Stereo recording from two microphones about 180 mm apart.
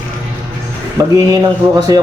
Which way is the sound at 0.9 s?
20° right (ahead or behind).